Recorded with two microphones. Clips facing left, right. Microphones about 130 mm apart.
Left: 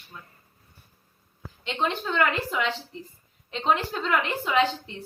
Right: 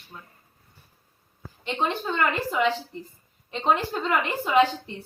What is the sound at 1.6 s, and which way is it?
Speech, 15° right (ahead or behind).